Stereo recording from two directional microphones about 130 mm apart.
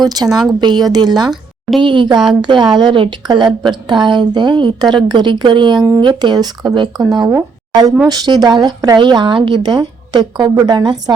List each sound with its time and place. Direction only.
0.0 s a woman's voice: 30° right (ahead or behind)